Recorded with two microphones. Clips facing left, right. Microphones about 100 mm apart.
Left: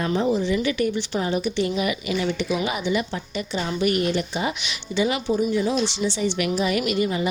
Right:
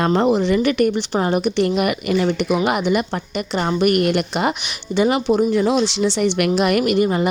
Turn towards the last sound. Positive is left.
turn(degrees=-50)  # may be behind; listen again after turning